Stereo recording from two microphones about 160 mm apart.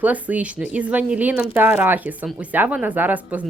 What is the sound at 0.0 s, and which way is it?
Speech, 10° right (ahead or behind).